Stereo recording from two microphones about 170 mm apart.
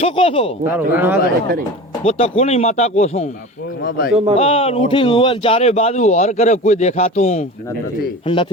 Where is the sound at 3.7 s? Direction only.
65° left (ahead or behind).